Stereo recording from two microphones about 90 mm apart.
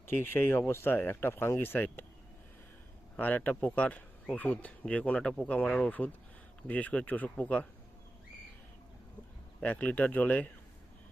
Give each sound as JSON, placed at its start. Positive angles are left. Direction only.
{"t": 0.1, "sound": "speech", "side_deg": 25}
{"t": 3.2, "sound": "speech", "side_deg": 20}
{"t": 9.6, "sound": "speech", "side_deg": 15}